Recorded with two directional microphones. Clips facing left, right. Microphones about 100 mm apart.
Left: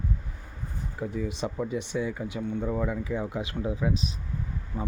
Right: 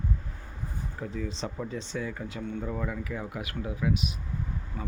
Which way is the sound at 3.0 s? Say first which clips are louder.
Left 5 dB; 20° left (ahead or behind).